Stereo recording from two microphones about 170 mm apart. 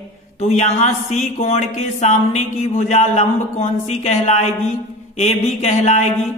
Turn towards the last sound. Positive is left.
turn(degrees=40)  # may be behind; listen again after turning